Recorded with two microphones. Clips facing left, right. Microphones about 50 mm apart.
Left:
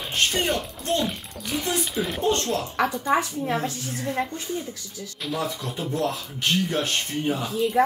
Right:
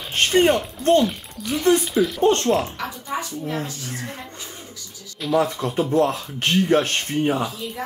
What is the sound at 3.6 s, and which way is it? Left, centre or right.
Speech, left.